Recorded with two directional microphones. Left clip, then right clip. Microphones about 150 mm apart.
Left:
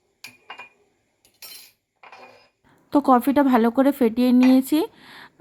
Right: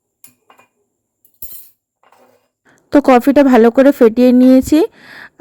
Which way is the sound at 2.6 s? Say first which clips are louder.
Right 9 dB; 50° right (ahead or behind).